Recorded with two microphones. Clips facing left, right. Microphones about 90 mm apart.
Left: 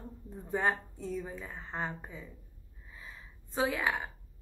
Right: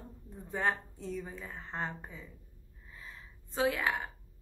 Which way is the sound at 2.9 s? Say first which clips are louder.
Even; 5° left (ahead or behind).